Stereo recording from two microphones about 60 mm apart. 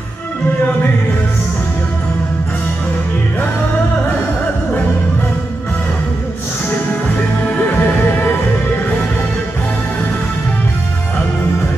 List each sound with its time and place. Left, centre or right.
7.7 s music: left